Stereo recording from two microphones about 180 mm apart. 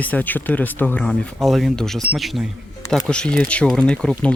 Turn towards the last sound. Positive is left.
turn(degrees=5)  # may be behind; listen again after turning